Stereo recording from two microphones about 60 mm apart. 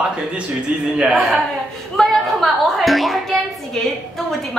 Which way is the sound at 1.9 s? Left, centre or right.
Centre.